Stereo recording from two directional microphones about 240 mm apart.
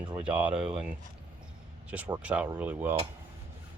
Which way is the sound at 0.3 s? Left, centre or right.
Centre.